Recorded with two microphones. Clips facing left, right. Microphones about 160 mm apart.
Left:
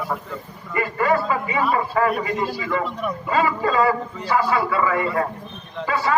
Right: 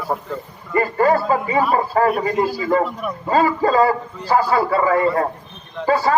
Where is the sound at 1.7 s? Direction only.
40° right (ahead or behind).